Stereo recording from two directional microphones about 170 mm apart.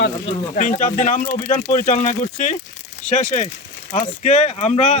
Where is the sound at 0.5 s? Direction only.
50° left (ahead or behind).